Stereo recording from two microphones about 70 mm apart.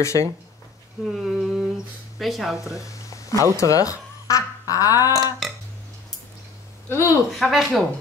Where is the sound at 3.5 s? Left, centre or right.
Left.